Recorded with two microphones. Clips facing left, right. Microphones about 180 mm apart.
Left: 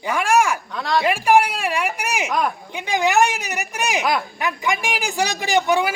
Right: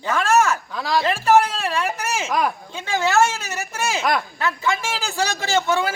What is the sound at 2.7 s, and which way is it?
A man's voice, 15° left (ahead or behind).